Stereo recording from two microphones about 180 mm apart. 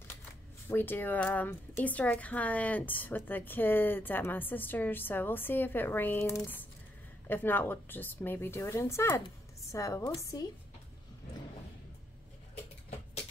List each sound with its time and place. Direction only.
0.7 s speech: 10° left (ahead or behind)